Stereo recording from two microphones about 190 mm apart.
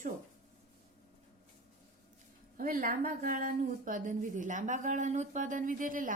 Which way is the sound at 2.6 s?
45° right (ahead or behind).